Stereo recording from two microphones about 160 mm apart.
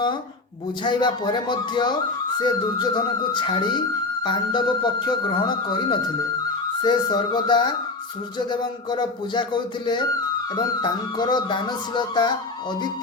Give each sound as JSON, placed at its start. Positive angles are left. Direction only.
{"t": 0.9, "sound": "speech", "side_deg": 30}